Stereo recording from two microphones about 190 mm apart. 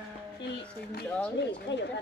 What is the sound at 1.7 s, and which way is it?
Speech, 65° left (ahead or behind).